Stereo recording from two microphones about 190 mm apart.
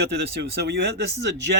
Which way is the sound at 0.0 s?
60° right (ahead or behind).